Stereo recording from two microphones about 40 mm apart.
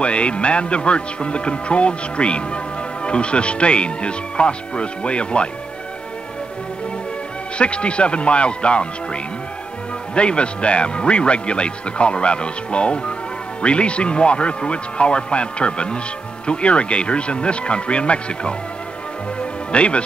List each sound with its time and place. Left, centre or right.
0.0 s speech: left
7.5 s speech: left
19.7 s speech: left